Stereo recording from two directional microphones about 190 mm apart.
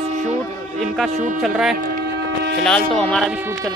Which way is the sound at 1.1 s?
35° right (ahead or behind).